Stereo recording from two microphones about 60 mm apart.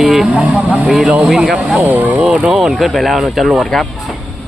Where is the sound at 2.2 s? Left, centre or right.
Centre.